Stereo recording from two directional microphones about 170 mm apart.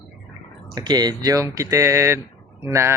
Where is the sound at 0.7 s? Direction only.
25° right (ahead or behind).